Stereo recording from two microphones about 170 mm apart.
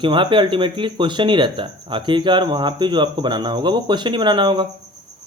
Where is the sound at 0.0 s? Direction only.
30° right (ahead or behind).